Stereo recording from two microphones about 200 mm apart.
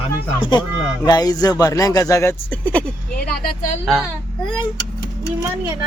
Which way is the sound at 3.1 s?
45° left (ahead or behind).